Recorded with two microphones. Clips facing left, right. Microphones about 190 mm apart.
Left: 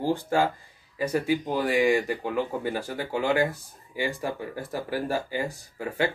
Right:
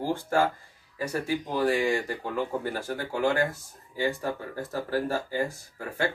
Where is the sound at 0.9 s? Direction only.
15° left (ahead or behind).